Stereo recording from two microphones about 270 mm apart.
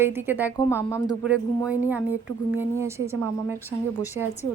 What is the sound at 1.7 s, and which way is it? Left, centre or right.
A woman's voice, centre.